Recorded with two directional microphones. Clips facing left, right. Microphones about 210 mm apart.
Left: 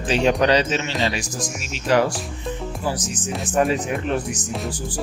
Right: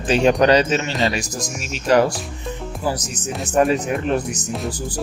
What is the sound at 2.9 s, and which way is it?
Speech, 40° right (ahead or behind).